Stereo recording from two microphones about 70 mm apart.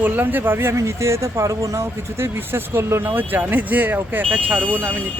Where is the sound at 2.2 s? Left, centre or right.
Right.